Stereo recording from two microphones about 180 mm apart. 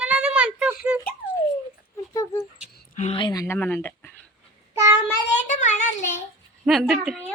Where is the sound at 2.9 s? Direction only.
35° left (ahead or behind); by 4.1 s 10° left (ahead or behind).